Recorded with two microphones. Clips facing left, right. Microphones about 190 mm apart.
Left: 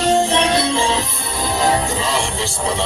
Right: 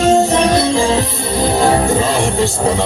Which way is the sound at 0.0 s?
35° right (ahead or behind).